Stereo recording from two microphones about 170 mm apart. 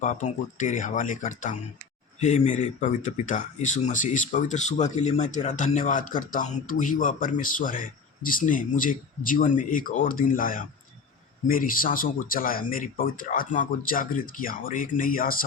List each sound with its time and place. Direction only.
0.0 s speech: 45° left (ahead or behind)